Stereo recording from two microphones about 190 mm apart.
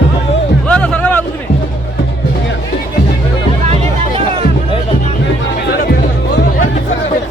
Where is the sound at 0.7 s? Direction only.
5° left (ahead or behind).